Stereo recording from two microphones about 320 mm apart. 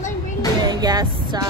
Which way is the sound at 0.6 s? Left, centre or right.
Centre.